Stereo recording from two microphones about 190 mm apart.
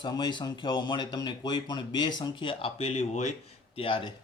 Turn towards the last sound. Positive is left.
turn(degrees=25)  # may be behind; listen again after turning